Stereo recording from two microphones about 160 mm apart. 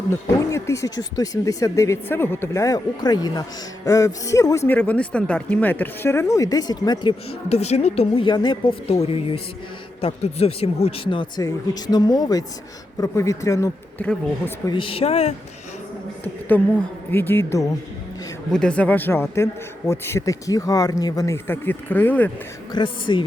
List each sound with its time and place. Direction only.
0.1 s speech: 20° left (ahead or behind)
7.5 s speech: 40° left (ahead or behind); by 13.7 s 20° left (ahead or behind)
14.0 s speech: 10° left (ahead or behind)
14.7 s speech: 35° left (ahead or behind)
16.5 s speech: 10° left (ahead or behind)
18.5 s speech: 5° left (ahead or behind)
22.7 s speech: 30° left (ahead or behind)